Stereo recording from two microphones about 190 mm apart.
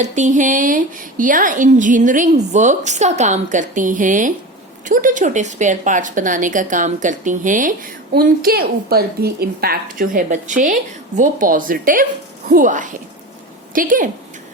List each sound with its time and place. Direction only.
0.0 s a woman's voice: 40° right (ahead or behind)